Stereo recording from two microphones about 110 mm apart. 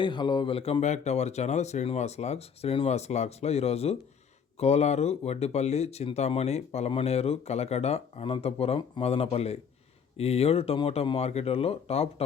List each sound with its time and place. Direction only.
0.0 s speech: 45° left (ahead or behind); by 12.2 s 65° left (ahead or behind)